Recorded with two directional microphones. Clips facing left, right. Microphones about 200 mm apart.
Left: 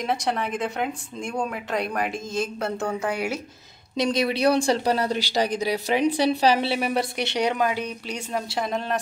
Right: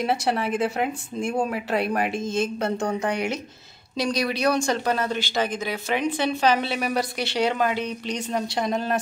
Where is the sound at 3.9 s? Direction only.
25° left (ahead or behind).